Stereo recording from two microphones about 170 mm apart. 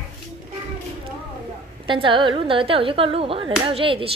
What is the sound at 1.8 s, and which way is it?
A woman's voice, 30° right (ahead or behind).